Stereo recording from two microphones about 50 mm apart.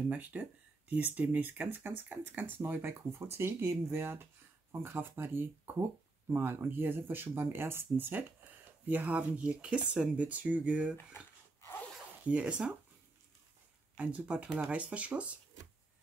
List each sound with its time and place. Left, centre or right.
0.1 s speech: right
8.8 s speech: right
12.3 s speech: right
13.9 s speech: right